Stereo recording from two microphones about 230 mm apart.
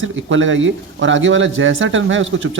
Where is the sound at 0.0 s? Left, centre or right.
Right.